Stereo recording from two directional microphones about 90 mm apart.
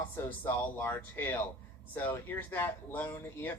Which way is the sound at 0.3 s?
20° left (ahead or behind).